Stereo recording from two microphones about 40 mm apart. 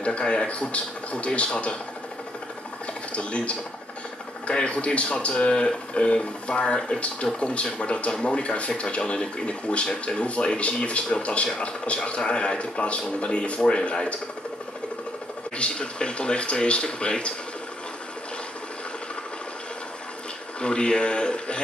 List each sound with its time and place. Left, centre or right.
0.0 s speech: left
3.1 s speech: left
15.5 s speech: left
20.6 s speech: left